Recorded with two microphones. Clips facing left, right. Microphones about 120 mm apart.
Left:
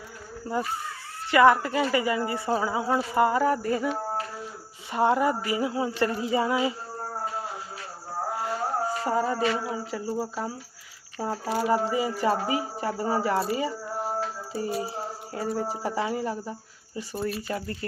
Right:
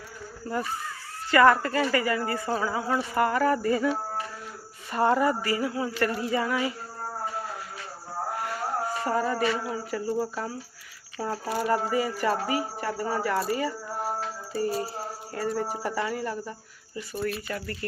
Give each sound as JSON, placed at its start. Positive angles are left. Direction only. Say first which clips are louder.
{"t": 0.4, "sound": "speech", "louder": "left 1 dB", "side_deg": 15}
{"t": 8.3, "sound": "a sound", "louder": "left 3 dB", "side_deg": 25}
{"t": 9.0, "sound": "speech", "louder": "even", "side_deg": 15}
{"t": 11.5, "sound": "speech", "louder": "left 2 dB", "side_deg": 5}
{"t": 11.9, "sound": "speech", "louder": "left 1 dB", "side_deg": 20}
{"t": 13.6, "sound": "music", "louder": "left 1 dB", "side_deg": 25}
{"t": 14.7, "sound": "a sound", "louder": "even", "side_deg": 10}
{"t": 15.6, "sound": "speech", "louder": "left 1 dB", "side_deg": 25}